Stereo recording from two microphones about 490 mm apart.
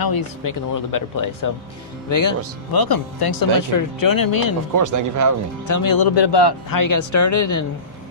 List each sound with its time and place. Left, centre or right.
0.0 s speech: left
4.7 s speech: right
5.6 s speech: left